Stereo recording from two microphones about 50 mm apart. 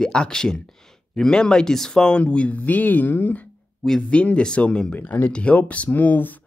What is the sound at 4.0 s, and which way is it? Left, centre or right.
Speech, left.